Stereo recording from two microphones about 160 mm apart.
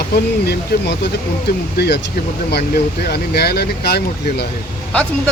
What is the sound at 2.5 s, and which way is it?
Speech, 85° left.